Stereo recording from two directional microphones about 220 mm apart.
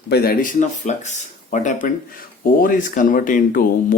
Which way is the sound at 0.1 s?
45° left (ahead or behind).